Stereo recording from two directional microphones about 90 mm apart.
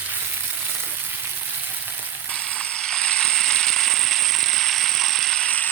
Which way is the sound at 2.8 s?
10° left (ahead or behind).